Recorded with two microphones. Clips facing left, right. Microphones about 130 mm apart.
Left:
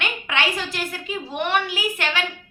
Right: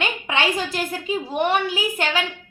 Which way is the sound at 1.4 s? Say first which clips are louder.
Right 1 dB; 35° right (ahead or behind).